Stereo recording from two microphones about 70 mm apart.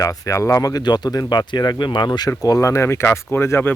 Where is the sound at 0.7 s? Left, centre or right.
Left.